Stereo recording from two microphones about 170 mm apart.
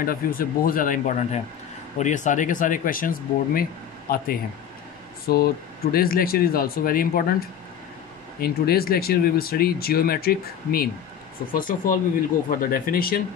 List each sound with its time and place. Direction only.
0.0 s speech: 55° left (ahead or behind)
5.2 s speech: 65° left (ahead or behind)